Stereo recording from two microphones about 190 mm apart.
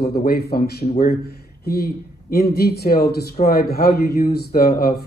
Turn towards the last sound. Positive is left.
turn(degrees=55)  # may be behind; listen again after turning